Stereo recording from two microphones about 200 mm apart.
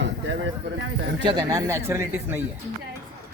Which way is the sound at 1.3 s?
20° right (ahead or behind).